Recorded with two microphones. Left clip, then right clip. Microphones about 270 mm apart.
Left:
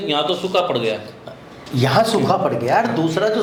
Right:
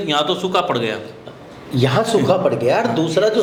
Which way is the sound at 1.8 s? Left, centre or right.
Centre.